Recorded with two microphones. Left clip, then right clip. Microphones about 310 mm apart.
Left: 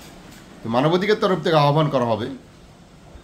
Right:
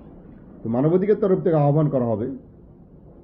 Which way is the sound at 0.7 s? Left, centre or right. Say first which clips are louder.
Left 1 dB; centre.